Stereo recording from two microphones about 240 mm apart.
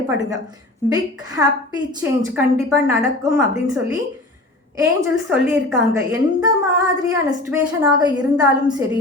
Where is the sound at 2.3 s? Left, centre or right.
Centre.